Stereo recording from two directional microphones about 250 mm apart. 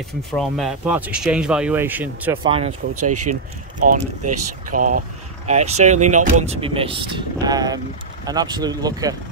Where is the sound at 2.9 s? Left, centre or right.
Right.